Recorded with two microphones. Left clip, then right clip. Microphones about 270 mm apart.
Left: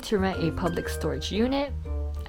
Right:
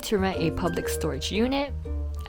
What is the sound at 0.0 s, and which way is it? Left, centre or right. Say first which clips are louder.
Speech: right 1 dB; centre.